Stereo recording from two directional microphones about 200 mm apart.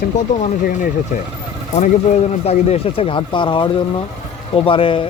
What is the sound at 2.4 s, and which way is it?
Speech, 30° left (ahead or behind).